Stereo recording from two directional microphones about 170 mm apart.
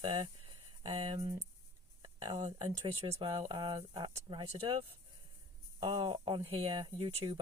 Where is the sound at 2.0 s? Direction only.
25° right (ahead or behind).